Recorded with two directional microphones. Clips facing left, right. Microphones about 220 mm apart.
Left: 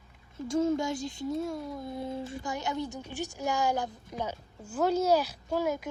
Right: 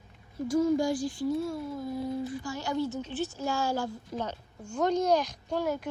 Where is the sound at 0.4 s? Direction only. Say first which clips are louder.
Right 2 dB; 25° left (ahead or behind).